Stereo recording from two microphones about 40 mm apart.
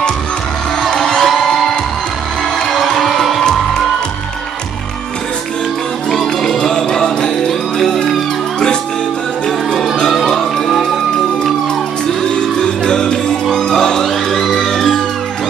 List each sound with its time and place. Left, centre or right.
0.8 s music: centre
2.6 s music: centre
6.0 s music: centre
6.6 s music: centre
10.3 s music: centre
12.2 s music: centre
14.0 s music: centre